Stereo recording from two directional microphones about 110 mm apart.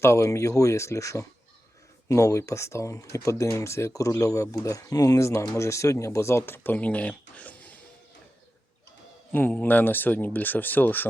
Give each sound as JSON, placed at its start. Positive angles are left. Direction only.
{"t": 0.0, "sound": "speech", "side_deg": 25}
{"t": 9.3, "sound": "speech", "side_deg": 15}